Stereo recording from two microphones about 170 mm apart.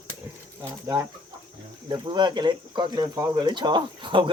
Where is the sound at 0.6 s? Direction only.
20° right (ahead or behind).